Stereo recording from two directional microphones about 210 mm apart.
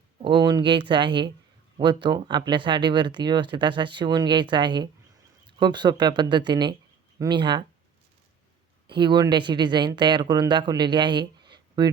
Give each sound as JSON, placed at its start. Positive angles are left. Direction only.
{"t": 0.2, "sound": "speech", "side_deg": -20}
{"t": 8.9, "sound": "speech", "side_deg": -20}